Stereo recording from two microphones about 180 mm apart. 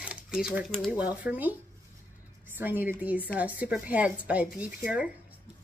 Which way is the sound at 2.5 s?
10° right (ahead or behind).